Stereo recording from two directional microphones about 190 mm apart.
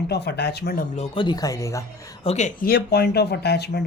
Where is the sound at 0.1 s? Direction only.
60° left (ahead or behind).